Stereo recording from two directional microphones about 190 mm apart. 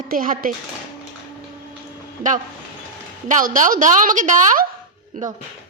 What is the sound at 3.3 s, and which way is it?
A woman's voice, 45° right (ahead or behind).